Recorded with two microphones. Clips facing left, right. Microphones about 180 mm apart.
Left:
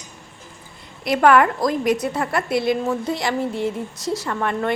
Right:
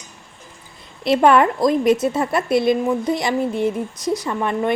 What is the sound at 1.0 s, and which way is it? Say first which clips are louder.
A woman's voice: right 1 dB; 25° right (ahead or behind).